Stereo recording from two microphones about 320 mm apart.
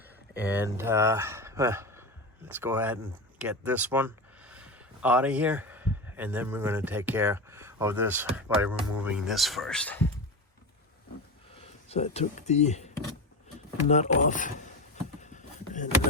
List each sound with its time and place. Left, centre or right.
0.3 s speech: centre
11.5 s speech: centre
15.2 s a sound: left